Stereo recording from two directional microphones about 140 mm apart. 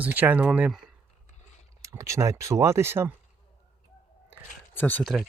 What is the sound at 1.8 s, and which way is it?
Speech, 20° right (ahead or behind).